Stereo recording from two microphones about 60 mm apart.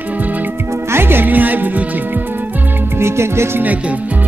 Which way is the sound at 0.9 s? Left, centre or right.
Right.